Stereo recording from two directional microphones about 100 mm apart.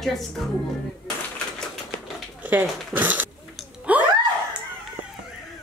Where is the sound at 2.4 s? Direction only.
15° right (ahead or behind).